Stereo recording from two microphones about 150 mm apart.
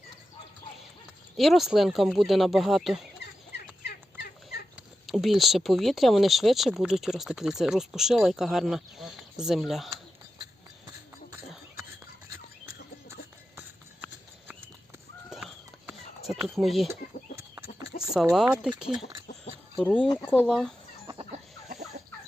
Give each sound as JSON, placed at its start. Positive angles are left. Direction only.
{"t": 1.4, "sound": "speech", "side_deg": 0}
{"t": 5.0, "sound": "speech", "side_deg": 0}
{"t": 13.6, "sound": "horse", "side_deg": -15}
{"t": 15.3, "sound": "a sound", "side_deg": -5}
{"t": 16.6, "sound": "speech", "side_deg": 0}
{"t": 16.9, "sound": "chicken", "side_deg": -20}
{"t": 18.0, "sound": "speech", "side_deg": -5}
{"t": 20.2, "sound": "speech", "side_deg": 10}
{"t": 21.7, "sound": "fowl", "side_deg": -50}